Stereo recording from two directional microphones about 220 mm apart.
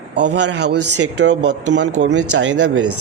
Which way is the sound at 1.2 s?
50° right (ahead or behind).